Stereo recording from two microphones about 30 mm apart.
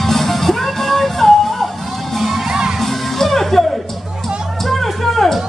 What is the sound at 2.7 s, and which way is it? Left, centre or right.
Music, centre.